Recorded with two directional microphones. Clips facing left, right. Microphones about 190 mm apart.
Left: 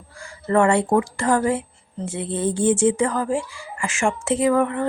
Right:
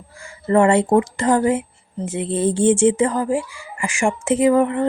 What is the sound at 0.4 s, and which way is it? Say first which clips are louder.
A woman's voice: right 3 dB; 20° right (ahead or behind).